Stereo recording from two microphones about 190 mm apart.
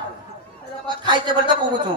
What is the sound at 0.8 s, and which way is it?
Speech, 25° right (ahead or behind).